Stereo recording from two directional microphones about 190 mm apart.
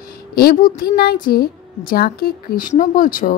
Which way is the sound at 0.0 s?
50° left (ahead or behind).